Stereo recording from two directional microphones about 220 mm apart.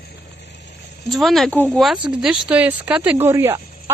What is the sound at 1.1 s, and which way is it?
Speech, centre (ahead or behind).